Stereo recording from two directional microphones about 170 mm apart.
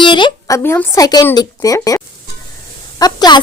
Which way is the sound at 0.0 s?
30° left (ahead or behind).